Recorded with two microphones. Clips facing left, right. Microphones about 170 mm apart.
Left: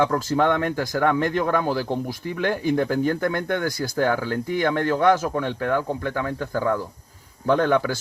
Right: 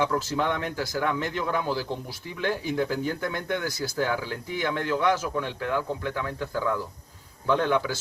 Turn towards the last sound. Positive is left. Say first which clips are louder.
# left 4 dB
turn(degrees=50)  # may be behind; listen again after turning